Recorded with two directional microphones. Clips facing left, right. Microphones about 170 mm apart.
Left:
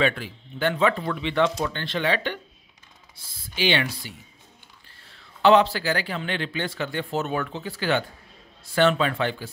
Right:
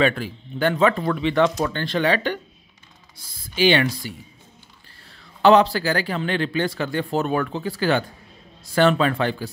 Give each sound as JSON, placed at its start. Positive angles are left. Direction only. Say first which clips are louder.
{"t": 0.0, "sound": "speech", "louder": "right 4 dB", "side_deg": -45}
{"t": 3.5, "sound": "speech", "louder": "right 6 dB", "side_deg": -45}
{"t": 5.4, "sound": "speech", "louder": "right 3 dB", "side_deg": -40}